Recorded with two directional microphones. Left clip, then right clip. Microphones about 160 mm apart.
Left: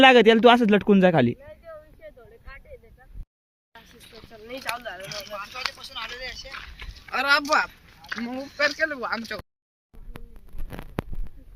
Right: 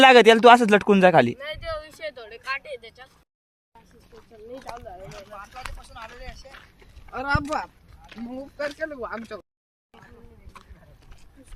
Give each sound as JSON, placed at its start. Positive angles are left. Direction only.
{"t": 0.0, "sound": "a man's voice", "side_deg": -10}
{"t": 1.7, "sound": "a sound", "side_deg": -50}
{"t": 5.9, "sound": "speech", "side_deg": -90}
{"t": 6.5, "sound": "boat", "side_deg": 25}
{"t": 7.3, "sound": "speech", "side_deg": 0}
{"t": 8.2, "sound": "speech", "side_deg": -20}
{"t": 8.9, "sound": "a man's voice", "side_deg": 0}